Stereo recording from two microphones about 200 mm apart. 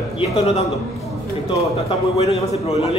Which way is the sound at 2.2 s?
30° left (ahead or behind).